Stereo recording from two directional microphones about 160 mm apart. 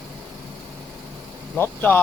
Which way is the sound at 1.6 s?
10° left (ahead or behind).